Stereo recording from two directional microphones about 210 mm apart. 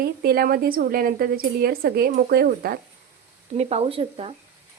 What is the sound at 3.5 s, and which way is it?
Speech, 30° right (ahead or behind).